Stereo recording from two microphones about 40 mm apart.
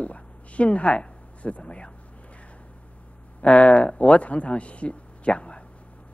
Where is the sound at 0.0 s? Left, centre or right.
Left.